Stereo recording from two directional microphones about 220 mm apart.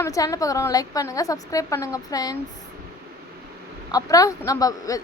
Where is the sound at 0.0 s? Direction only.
15° left (ahead or behind).